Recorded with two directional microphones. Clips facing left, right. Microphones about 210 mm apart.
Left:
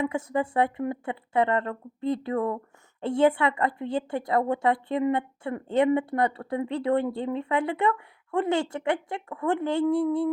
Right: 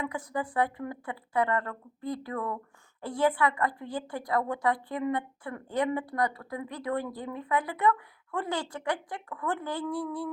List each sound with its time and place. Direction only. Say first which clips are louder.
0.0 s a woman's voice: left 6 dB; 25° left (ahead or behind)